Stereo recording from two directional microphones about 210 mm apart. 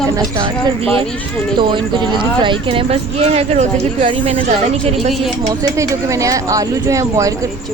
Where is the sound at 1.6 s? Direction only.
20° right (ahead or behind).